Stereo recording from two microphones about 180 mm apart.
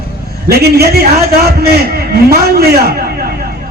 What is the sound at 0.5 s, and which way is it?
A man's voice, 60° right (ahead or behind).